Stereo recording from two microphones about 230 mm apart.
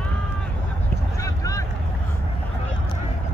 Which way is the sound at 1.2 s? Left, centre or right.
Centre.